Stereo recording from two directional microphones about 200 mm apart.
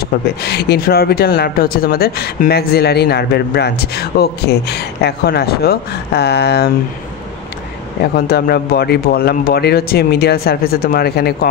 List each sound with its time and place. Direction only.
0.4 s speech: 55° left (ahead or behind)
8.0 s speech: 50° left (ahead or behind)